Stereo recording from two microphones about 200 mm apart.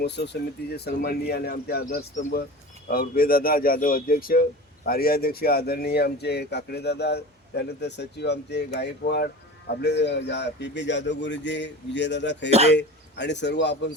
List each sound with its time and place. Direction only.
0.7 s speech: 50° left (ahead or behind)
12.5 s speech: 30° right (ahead or behind)
12.7 s speech: 60° left (ahead or behind)